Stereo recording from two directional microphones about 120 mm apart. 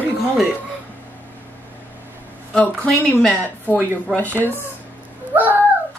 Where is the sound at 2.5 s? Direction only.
10° left (ahead or behind).